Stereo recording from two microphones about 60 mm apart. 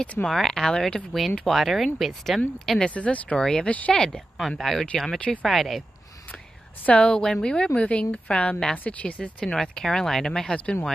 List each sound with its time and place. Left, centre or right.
0.0 s speech: left
0.3 s speech: centre
1.4 s speech: centre
2.8 s speech: left
3.3 s speech: centre
3.6 s speech: left
3.9 s speech: centre
5.2 s speech: centre
5.5 s speech: centre
6.9 s speech: left